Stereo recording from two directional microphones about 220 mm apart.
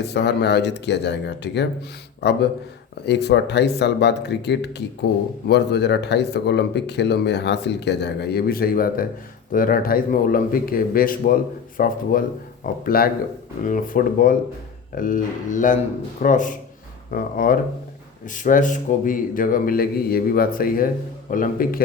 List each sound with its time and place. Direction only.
0.0 s speech: 50° left (ahead or behind)